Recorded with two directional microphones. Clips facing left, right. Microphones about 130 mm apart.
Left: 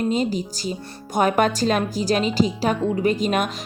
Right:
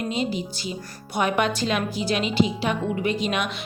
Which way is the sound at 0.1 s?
40° left (ahead or behind).